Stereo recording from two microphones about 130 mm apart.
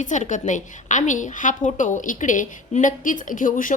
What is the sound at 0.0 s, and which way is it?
A woman's voice, 75° left (ahead or behind).